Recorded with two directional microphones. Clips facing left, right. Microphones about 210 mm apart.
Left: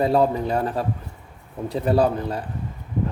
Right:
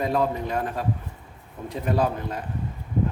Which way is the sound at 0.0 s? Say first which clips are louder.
Left 5 dB; 30° left (ahead or behind).